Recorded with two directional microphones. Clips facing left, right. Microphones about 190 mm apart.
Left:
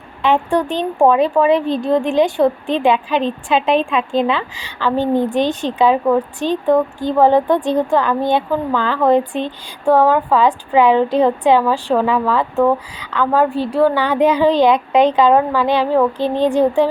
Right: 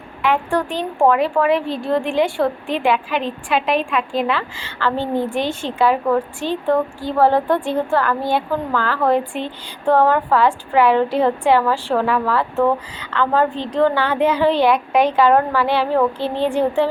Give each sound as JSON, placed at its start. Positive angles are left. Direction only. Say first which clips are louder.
{"t": 0.2, "sound": "a woman's voice", "louder": "left 3 dB", "side_deg": 25}